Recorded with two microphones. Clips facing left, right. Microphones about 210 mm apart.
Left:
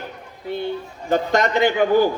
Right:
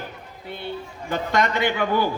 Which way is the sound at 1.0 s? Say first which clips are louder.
Left 4 dB; 45° left (ahead or behind).